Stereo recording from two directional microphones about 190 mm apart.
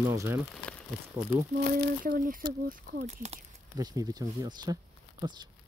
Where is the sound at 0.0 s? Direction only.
15° right (ahead or behind).